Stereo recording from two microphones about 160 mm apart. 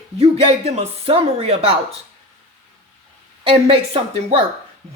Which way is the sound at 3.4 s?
35° right (ahead or behind).